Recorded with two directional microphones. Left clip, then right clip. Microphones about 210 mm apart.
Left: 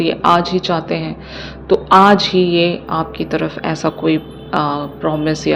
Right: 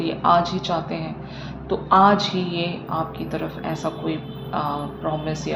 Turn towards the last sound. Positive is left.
turn(degrees=45)  # may be behind; listen again after turning